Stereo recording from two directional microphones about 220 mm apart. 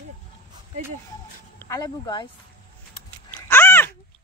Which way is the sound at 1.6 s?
15° left (ahead or behind).